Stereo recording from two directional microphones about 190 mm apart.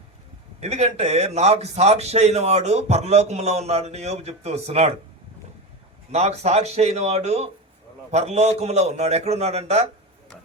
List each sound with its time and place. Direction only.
0.6 s a man's voice: 35° right (ahead or behind)
6.1 s a man's voice: 35° right (ahead or behind)